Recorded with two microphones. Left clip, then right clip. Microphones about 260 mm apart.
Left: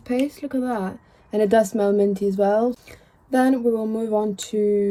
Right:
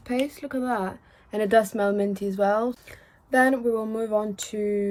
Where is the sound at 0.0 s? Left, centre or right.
Centre.